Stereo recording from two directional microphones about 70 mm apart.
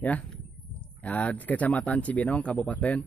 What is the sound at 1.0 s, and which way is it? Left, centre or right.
Speech, left.